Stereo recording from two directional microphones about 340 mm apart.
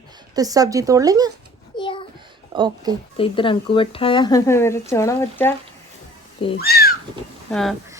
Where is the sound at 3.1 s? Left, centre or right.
Centre.